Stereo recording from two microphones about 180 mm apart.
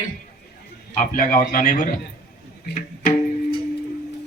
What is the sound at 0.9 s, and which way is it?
Mantra, 50° left (ahead or behind).